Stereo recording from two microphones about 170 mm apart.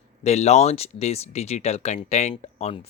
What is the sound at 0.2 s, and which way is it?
Speech, 40° left (ahead or behind).